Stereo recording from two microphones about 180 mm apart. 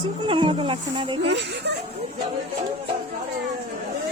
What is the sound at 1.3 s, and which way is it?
Speech, 70° right (ahead or behind).